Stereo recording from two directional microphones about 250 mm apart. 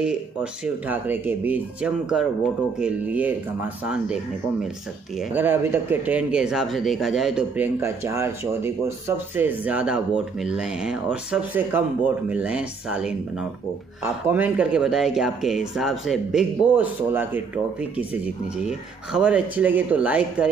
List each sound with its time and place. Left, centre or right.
0.0 s speech: centre